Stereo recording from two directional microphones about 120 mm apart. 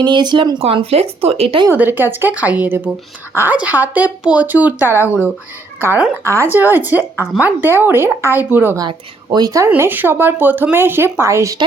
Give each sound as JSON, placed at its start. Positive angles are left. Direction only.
{"t": 0.0, "sound": "speech", "side_deg": -35}
{"t": 0.6, "sound": "speech", "side_deg": -55}
{"t": 1.7, "sound": "speech", "side_deg": -15}
{"t": 8.8, "sound": "speech", "side_deg": -35}
{"t": 9.6, "sound": "speech", "side_deg": -20}